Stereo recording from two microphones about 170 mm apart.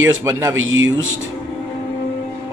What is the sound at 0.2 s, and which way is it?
Speech, 15° right (ahead or behind).